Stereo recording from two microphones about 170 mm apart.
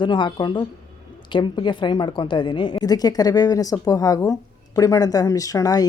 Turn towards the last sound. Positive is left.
turn(degrees=20)  # may be behind; listen again after turning